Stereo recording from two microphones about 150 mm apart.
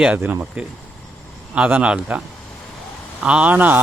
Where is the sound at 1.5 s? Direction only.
10° right (ahead or behind).